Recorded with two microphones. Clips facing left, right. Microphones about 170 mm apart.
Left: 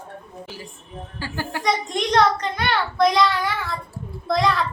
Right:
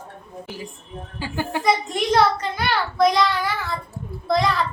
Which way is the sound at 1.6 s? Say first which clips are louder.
Right 2 dB; 5° right (ahead or behind).